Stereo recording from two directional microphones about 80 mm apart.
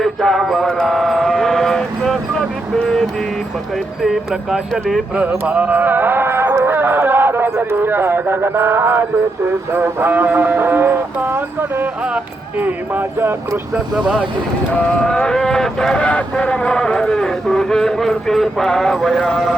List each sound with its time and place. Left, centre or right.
0.0 s mantra: centre
2.7 s music: centre
4.0 s speech: centre
5.1 s speech: centre
5.5 s music: centre
6.7 s a sound: right
7.6 s speech: right
12.0 s speech: centre
13.7 s speech: centre
14.9 s speech: centre